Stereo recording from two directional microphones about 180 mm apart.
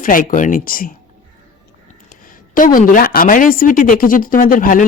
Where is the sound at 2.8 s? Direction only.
50° left (ahead or behind).